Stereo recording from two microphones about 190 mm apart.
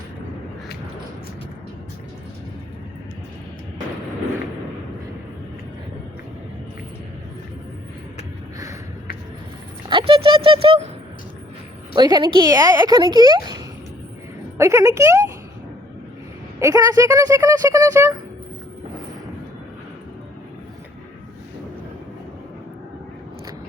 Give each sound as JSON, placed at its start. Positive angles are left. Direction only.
{"t": 9.9, "sound": "speech", "side_deg": -25}
{"t": 11.9, "sound": "speech", "side_deg": -20}
{"t": 14.6, "sound": "speech", "side_deg": -15}
{"t": 16.6, "sound": "speech", "side_deg": -15}